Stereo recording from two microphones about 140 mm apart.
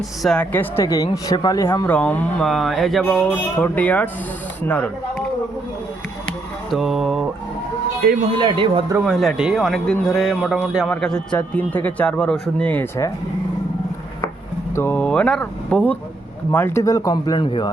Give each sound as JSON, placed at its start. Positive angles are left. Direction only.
{"t": 0.2, "sound": "a man's voice", "side_deg": 0}
{"t": 0.5, "sound": "a man's voice", "side_deg": 15}
{"t": 0.9, "sound": "speech", "side_deg": 25}
{"t": 1.9, "sound": "a man's voice", "side_deg": 10}
{"t": 3.0, "sound": "a man's voice", "side_deg": 10}
{"t": 6.7, "sound": "mantra", "side_deg": 0}
{"t": 8.0, "sound": "speech", "side_deg": -90}
{"t": 8.4, "sound": "speech", "side_deg": -35}
{"t": 9.0, "sound": "a man's voice", "side_deg": -5}
{"t": 10.8, "sound": "a man's voice", "side_deg": 5}
{"t": 14.8, "sound": "a man's voice", "side_deg": 15}
{"t": 17.4, "sound": "speech", "side_deg": 40}